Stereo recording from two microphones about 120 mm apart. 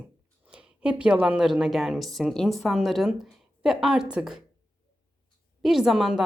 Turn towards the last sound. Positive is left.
turn(degrees=-5)  # may be behind; listen again after turning